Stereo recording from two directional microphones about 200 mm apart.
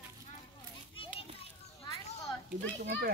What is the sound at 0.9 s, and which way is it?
Children playing, 25° left (ahead or behind).